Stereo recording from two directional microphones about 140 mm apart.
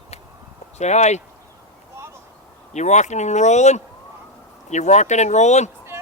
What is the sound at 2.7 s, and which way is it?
Speech, 55° left (ahead or behind).